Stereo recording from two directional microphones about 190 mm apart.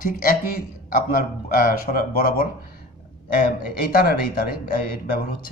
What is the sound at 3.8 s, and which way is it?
A man's voice, 50° left (ahead or behind).